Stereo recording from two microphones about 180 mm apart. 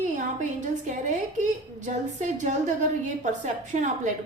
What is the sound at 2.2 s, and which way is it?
A woman's voice, 40° right (ahead or behind).